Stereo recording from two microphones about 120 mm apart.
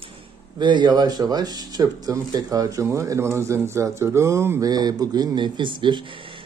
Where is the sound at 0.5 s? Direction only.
40° right (ahead or behind).